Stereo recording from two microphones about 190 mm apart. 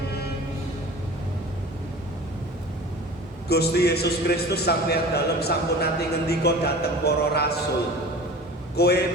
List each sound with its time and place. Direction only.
3.5 s a man's voice: 55° left (ahead or behind)
8.7 s a man's voice: 55° left (ahead or behind)